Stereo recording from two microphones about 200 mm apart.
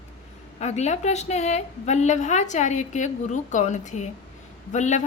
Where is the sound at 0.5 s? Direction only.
35° left (ahead or behind).